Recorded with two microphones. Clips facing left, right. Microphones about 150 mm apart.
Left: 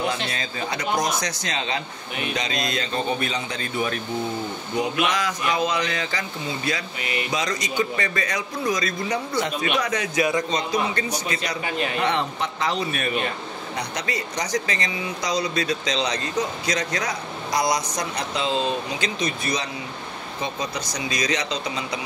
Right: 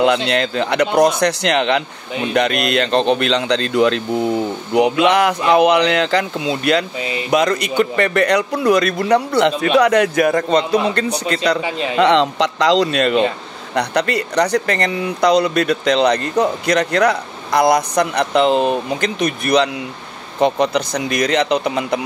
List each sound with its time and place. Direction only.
0.0 s a man's voice: 70° right (ahead or behind); by 4.3 s 90° right
5.0 s a man's voice: 65° right (ahead or behind)
7.2 s speech: 60° right (ahead or behind)
12.0 s speech: 90° right
13.7 s speech: 65° right (ahead or behind)